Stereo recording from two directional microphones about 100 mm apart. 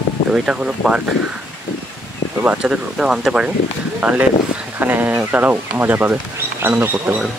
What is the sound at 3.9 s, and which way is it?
Speech, 20° right (ahead or behind).